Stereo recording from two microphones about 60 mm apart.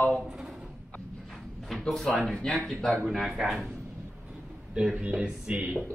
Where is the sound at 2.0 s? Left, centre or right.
Centre.